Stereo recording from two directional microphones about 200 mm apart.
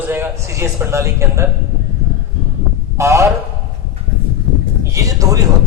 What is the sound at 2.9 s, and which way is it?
Speech, 15° right (ahead or behind).